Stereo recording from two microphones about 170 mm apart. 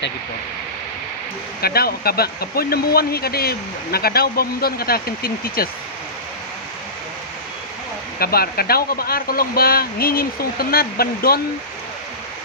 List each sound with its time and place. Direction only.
1.6 s speech: 65° left (ahead or behind)
8.2 s speech: 65° left (ahead or behind)